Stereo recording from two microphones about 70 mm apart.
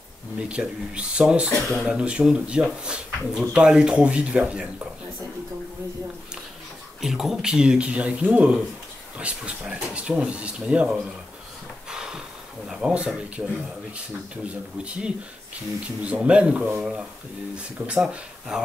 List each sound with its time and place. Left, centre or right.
0.4 s speech: centre
1.7 s speech: centre
2.0 s speech: centre
7.0 s speech: centre
11.9 s a sound: centre
12.8 s speech: centre